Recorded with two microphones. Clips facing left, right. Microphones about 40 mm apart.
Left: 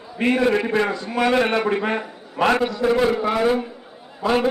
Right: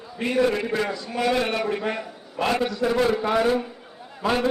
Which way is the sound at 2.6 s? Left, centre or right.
Centre.